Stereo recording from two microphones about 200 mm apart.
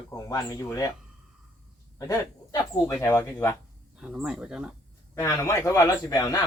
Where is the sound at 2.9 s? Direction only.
15° left (ahead or behind).